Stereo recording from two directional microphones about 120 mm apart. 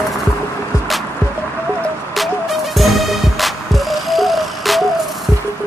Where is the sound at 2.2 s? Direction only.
Centre (ahead or behind).